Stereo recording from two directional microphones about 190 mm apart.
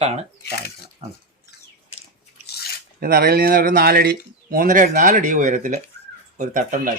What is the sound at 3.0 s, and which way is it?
Speech, 50° right (ahead or behind).